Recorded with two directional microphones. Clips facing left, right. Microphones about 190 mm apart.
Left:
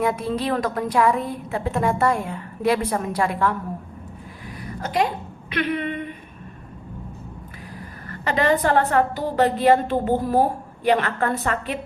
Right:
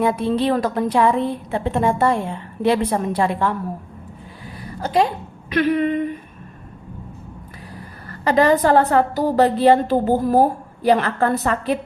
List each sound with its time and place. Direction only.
0.0 s a woman's voice: 30° right (ahead or behind)
4.5 s a sound: 30° right (ahead or behind)
5.5 s a woman's voice: 40° right (ahead or behind)
8.0 s a woman's voice: 40° right (ahead or behind)